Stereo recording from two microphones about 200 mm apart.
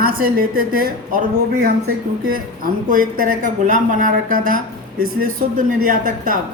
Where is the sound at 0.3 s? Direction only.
45° right (ahead or behind).